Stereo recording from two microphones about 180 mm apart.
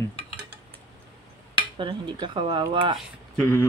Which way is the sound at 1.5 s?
25° right (ahead or behind).